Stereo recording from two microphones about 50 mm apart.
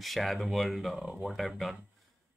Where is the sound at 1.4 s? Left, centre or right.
Centre.